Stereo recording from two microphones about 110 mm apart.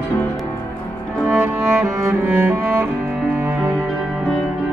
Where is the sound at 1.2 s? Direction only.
10° right (ahead or behind).